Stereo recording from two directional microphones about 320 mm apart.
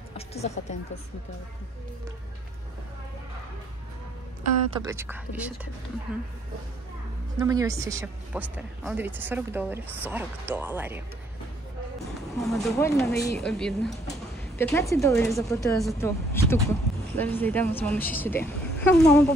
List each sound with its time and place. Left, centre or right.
0.3 s speech: centre
4.7 s speech: centre
7.3 s speech: centre
12.4 s speech: centre
13.1 s speech: left
13.4 s speech: centre